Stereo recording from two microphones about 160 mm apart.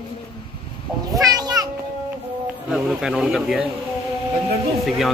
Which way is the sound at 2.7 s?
5° right (ahead or behind).